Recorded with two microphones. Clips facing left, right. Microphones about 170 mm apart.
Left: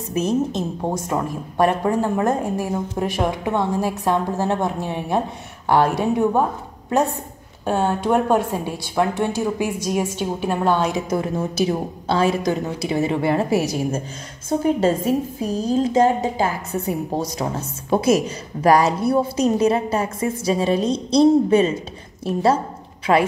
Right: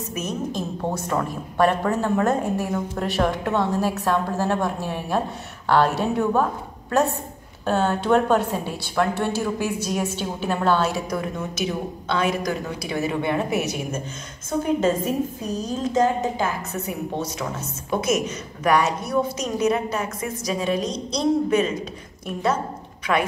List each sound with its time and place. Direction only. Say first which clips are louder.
0.1 s a woman's voice: left 8 dB; 30° left (ahead or behind)
7.6 s a woman's voice: left 1 dB; 10° left (ahead or behind); by 23.2 s 30° left (ahead or behind)